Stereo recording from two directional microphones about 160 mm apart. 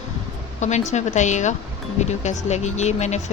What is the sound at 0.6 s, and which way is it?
Speech, 45° left (ahead or behind).